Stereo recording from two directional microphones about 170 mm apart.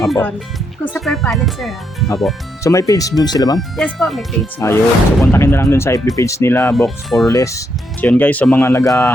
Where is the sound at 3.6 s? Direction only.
Centre (ahead or behind).